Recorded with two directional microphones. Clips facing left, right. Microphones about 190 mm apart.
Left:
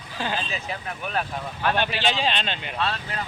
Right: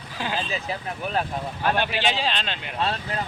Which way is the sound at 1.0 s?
30° right (ahead or behind).